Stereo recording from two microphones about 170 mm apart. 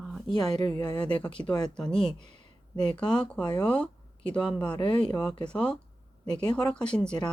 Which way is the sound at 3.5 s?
5° left (ahead or behind).